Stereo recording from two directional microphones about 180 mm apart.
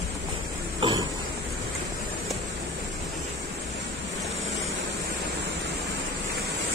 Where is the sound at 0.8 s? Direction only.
25° right (ahead or behind).